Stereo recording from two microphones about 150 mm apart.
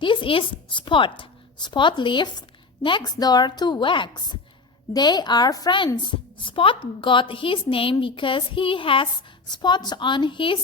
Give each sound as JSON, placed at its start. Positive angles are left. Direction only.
{"t": 0.0, "sound": "a woman's voice", "side_deg": 35}